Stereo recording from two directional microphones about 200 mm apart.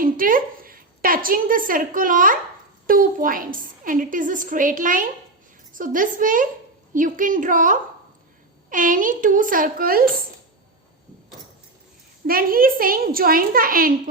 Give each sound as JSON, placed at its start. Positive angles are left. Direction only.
{"t": 0.0, "sound": "a woman's voice", "side_deg": -45}
{"t": 12.2, "sound": "a woman's voice", "side_deg": -45}